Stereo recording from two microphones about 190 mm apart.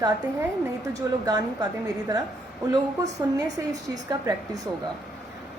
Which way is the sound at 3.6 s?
15° right (ahead or behind).